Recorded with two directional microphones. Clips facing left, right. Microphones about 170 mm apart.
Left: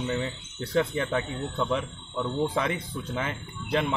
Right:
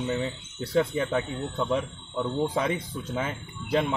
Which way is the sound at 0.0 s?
10° right (ahead or behind).